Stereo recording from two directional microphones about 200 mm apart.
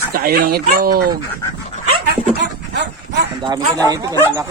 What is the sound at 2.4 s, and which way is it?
Dog, 60° right (ahead or behind).